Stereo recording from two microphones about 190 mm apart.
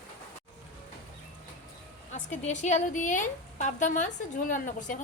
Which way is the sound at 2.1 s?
40° left (ahead or behind).